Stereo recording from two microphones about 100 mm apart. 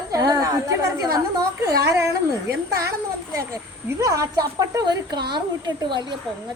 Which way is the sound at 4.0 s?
35° right (ahead or behind).